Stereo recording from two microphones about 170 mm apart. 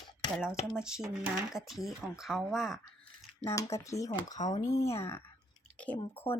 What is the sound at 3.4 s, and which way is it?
Speech, 20° left (ahead or behind).